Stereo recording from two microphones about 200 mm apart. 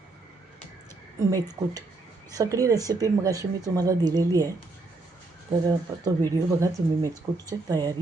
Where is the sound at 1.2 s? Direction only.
20° right (ahead or behind).